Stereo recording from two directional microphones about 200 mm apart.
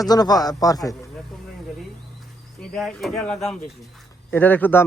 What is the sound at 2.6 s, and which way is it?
A man's voice, centre (ahead or behind).